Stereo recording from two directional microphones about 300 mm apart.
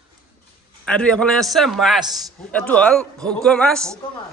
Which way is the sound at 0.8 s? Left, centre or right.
Centre.